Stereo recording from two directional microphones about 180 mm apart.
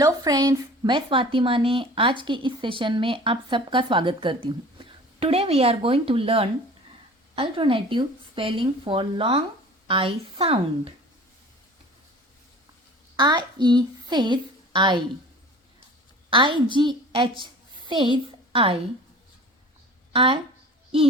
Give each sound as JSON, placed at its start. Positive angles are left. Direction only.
{"t": 0.0, "sound": "speech", "side_deg": -20}
{"t": 13.1, "sound": "a woman's voice", "side_deg": -25}
{"t": 16.3, "sound": "a woman's voice", "side_deg": -25}
{"t": 20.1, "sound": "speech", "side_deg": -30}